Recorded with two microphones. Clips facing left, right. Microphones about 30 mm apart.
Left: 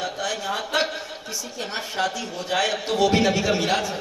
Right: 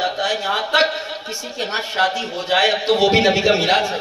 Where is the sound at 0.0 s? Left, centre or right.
Right.